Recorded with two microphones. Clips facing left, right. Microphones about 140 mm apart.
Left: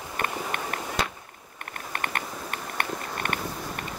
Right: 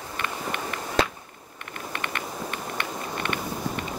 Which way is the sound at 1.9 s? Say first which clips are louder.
Left 1 dB; 45° left (ahead or behind).